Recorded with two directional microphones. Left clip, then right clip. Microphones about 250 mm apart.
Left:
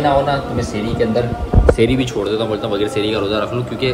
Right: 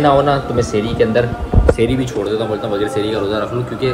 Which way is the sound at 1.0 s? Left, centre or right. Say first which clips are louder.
Right 3 dB; centre.